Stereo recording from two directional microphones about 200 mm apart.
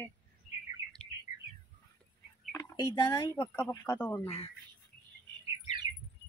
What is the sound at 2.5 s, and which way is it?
Speech, 15° left (ahead or behind).